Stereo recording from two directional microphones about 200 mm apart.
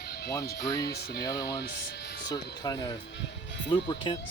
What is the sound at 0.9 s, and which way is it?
Speech, 50° left (ahead or behind).